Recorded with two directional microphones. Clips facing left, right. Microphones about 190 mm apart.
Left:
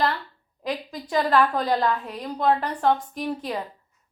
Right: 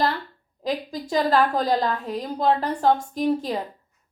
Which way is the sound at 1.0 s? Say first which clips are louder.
Even; 35° right (ahead or behind).